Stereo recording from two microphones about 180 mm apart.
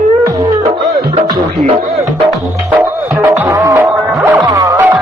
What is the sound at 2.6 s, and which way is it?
Music, 10° right (ahead or behind).